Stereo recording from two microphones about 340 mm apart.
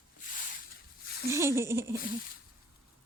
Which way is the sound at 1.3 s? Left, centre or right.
Centre.